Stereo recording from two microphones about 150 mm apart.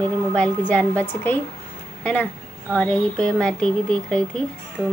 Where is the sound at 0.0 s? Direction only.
10° left (ahead or behind).